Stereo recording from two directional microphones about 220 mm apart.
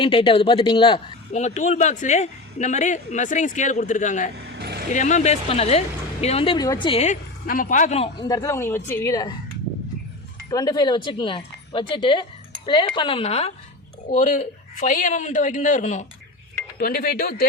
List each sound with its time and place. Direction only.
0.0 s a man's voice: 25° left (ahead or behind)
4.5 s vehicle: 50° right (ahead or behind)
4.9 s speech: 35° left (ahead or behind)
8.3 s a woman's voice: 15° left (ahead or behind)
10.5 s a man's voice: 20° left (ahead or behind); by 16.0 s 35° left (ahead or behind)
16.7 s speech: 45° left (ahead or behind)